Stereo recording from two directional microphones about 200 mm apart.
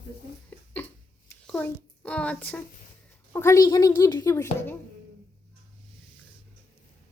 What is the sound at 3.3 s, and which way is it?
A woman's voice, 15° left (ahead or behind).